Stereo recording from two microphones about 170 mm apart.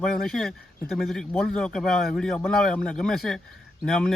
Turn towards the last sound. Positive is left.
turn(degrees=5)  # may be behind; listen again after turning